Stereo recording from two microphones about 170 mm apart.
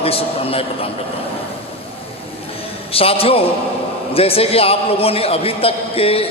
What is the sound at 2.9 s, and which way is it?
A man's voice, 35° left (ahead or behind).